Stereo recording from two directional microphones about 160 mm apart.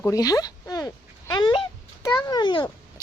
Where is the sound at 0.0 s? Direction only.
20° left (ahead or behind).